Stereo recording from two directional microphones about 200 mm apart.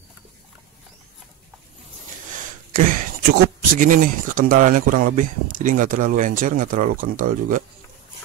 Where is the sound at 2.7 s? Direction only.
45° right (ahead or behind).